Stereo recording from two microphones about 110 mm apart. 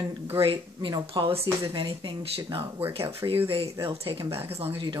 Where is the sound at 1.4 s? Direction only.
30° right (ahead or behind).